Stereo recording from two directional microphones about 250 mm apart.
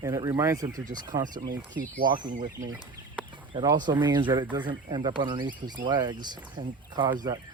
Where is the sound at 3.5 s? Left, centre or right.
Centre.